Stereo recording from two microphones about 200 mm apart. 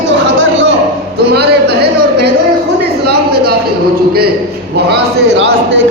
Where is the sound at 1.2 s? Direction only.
55° right (ahead or behind).